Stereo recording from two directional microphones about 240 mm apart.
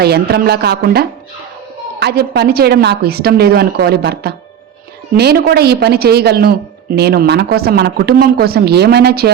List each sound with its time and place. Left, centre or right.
0.0 s speech: right